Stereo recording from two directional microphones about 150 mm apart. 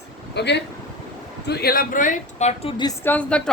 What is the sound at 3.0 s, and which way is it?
Speech, 10° left (ahead or behind).